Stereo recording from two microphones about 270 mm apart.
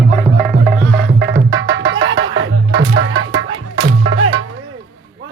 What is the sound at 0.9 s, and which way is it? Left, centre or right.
Music, right.